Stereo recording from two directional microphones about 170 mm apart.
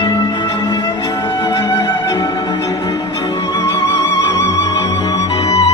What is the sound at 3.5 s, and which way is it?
Music, 20° left (ahead or behind).